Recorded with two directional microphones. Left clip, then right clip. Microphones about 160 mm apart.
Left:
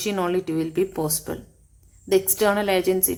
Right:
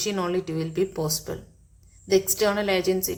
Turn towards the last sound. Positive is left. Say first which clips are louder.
# left 2 dB
turn(degrees=35)  # may be behind; listen again after turning